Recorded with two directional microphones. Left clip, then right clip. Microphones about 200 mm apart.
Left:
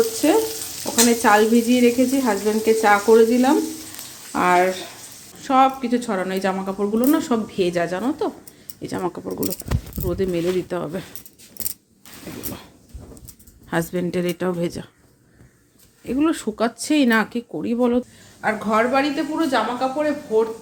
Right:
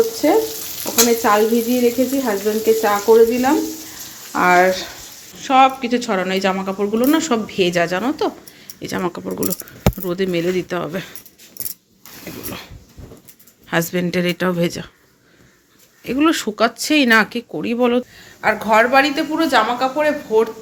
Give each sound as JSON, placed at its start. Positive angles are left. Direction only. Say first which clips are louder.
{"t": 0.2, "sound": "frying", "louder": "right 3 dB", "side_deg": 5}
{"t": 3.1, "sound": "frying", "louder": "right 6 dB", "side_deg": 20}
{"t": 5.4, "sound": "speech", "louder": "right 4 dB", "side_deg": 15}
{"t": 8.8, "sound": "frying", "louder": "right 3 dB", "side_deg": 10}
{"t": 9.3, "sound": "speech", "louder": "right 3 dB", "side_deg": -10}
{"t": 10.0, "sound": "frying", "louder": "left 1 dB", "side_deg": 10}
{"t": 12.2, "sound": "dog", "louder": "right 3 dB", "side_deg": 5}
{"t": 13.7, "sound": "speech", "louder": "right 4 dB", "side_deg": 10}
{"t": 16.0, "sound": "speech", "louder": "right 4 dB", "side_deg": 0}
{"t": 18.3, "sound": "speech", "louder": "right 6 dB", "side_deg": -5}